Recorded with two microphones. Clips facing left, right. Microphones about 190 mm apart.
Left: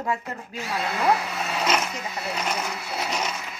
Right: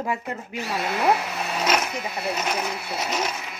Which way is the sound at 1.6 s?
5° right (ahead or behind).